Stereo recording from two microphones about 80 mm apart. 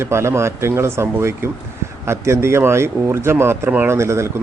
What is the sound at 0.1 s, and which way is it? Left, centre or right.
A man's voice, right.